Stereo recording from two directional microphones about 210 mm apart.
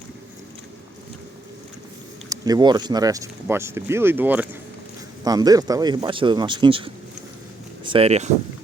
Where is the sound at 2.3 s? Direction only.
20° right (ahead or behind).